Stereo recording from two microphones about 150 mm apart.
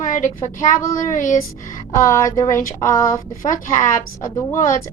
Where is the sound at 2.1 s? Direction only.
20° left (ahead or behind).